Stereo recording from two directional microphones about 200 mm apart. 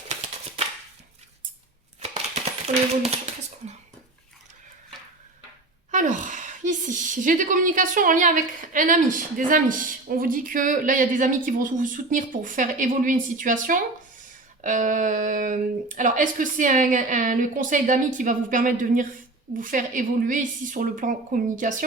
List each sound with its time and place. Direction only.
2.0 s scissors: 30° right (ahead or behind)
5.9 s a woman's voice: 40° right (ahead or behind)